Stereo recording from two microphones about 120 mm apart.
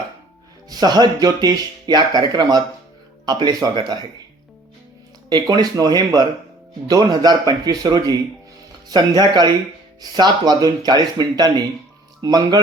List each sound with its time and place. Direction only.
0.7 s speech: 35° right (ahead or behind)
5.3 s speech: 35° right (ahead or behind)